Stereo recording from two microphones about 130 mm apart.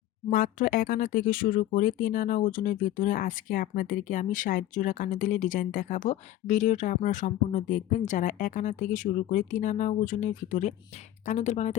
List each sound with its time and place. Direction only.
0.3 s speech: 90° left
11.3 s speech: 65° left (ahead or behind)